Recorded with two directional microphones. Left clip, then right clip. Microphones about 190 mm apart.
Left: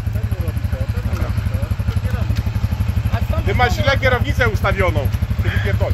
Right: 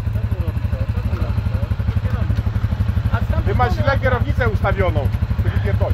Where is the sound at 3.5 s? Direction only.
40° left (ahead or behind).